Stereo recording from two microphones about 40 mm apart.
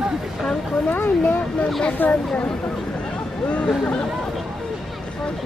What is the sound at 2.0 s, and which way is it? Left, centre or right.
Speech, left.